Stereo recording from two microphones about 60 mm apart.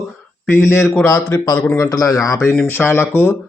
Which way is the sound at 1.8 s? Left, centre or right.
Left.